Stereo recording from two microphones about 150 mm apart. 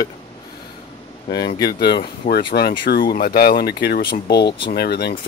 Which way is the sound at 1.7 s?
90° left.